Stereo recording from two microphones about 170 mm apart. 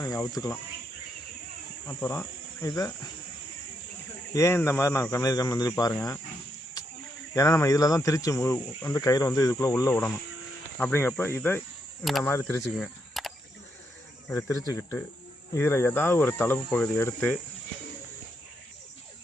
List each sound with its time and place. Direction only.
0.0 s speech: 20° left (ahead or behind)
1.9 s speech: 15° left (ahead or behind)
4.4 s speech: 15° left (ahead or behind)
7.3 s speech: 20° left (ahead or behind)
12.6 s cricket: centre (ahead or behind)
14.3 s speech: 15° left (ahead or behind)